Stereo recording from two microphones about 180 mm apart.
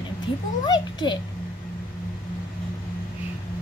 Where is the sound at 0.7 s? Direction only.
25° left (ahead or behind).